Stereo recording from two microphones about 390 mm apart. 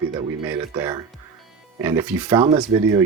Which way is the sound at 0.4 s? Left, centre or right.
Centre.